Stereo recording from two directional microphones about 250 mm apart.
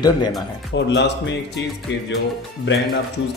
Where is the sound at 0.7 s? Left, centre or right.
Left.